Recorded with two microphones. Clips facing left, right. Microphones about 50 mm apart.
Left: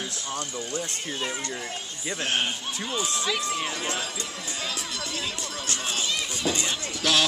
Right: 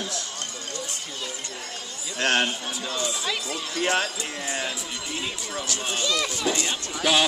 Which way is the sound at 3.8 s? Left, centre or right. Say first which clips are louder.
Right 7 dB; right.